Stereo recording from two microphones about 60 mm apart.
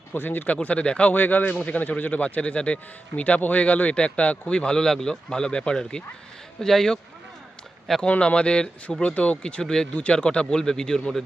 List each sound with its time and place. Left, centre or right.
0.1 s speech: left; by 7.0 s centre
8.0 s speech: centre